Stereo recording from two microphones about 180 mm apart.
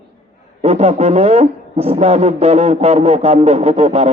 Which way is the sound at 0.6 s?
35° right (ahead or behind).